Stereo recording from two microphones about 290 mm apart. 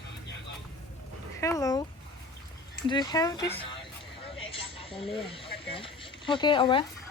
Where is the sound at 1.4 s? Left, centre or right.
Centre.